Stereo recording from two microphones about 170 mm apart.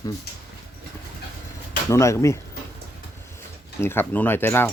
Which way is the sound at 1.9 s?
15° left (ahead or behind).